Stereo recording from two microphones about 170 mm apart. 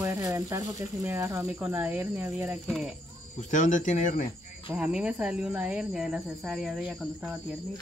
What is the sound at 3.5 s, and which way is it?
Speech, 45° left (ahead or behind).